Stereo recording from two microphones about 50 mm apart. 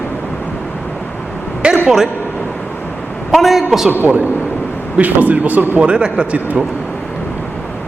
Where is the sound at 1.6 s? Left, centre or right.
Right.